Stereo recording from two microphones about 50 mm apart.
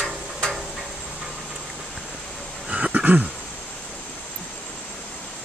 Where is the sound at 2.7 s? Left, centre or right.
Right.